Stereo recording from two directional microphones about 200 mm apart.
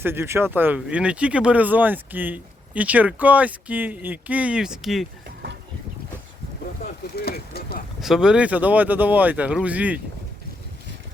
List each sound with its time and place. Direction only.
0.0 s speech: 10° right (ahead or behind)
7.2 s speech: 50° left (ahead or behind)
8.0 s speech: 5° right (ahead or behind)